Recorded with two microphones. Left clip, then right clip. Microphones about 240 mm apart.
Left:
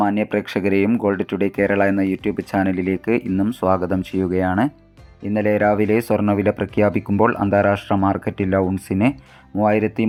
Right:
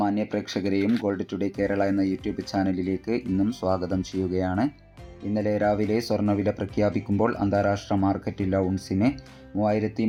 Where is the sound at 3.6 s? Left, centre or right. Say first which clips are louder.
Left 7 dB; left.